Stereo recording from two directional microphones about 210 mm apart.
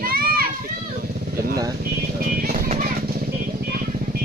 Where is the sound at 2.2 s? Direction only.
45° right (ahead or behind).